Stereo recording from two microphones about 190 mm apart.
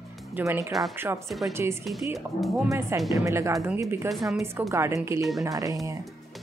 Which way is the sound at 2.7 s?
15° right (ahead or behind).